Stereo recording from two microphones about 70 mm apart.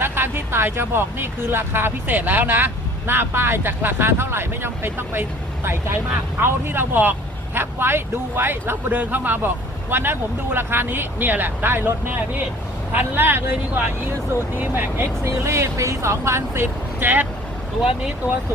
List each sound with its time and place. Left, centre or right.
0.0 s speech: right
6.4 s speech: right
17.0 s speech: right